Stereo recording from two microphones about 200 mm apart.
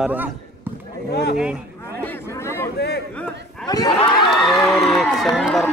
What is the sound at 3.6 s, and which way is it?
Speech, 20° left (ahead or behind).